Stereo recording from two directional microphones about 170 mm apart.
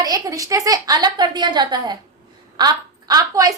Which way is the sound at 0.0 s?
20° right (ahead or behind).